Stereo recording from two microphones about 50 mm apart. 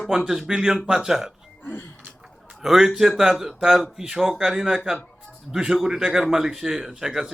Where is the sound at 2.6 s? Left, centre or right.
Centre.